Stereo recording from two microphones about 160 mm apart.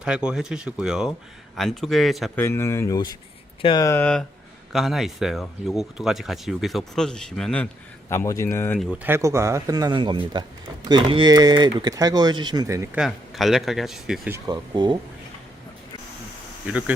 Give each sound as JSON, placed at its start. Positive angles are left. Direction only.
{"t": 0.0, "sound": "speech", "side_deg": -5}
{"t": 2.3, "sound": "speech", "side_deg": 15}
{"t": 3.8, "sound": "speech", "side_deg": 10}
{"t": 8.1, "sound": "speech", "side_deg": 15}
{"t": 9.0, "sound": "speech", "side_deg": -15}
{"t": 13.0, "sound": "speech", "side_deg": 0}
{"t": 14.3, "sound": "speech", "side_deg": -15}
{"t": 14.5, "sound": "speech", "side_deg": -30}
{"t": 16.6, "sound": "speech", "side_deg": -10}